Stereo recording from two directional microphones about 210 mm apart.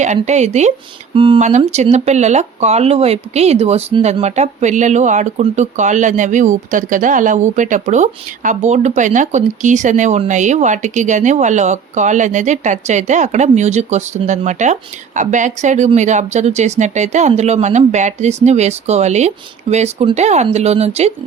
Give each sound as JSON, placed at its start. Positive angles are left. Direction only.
{"t": 0.0, "sound": "speech", "side_deg": -35}